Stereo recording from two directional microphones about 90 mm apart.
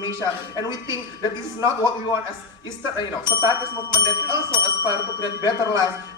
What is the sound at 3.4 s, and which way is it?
Speech, 50° left (ahead or behind).